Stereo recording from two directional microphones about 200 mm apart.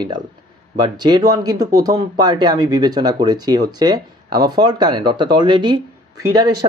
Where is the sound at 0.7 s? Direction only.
20° right (ahead or behind).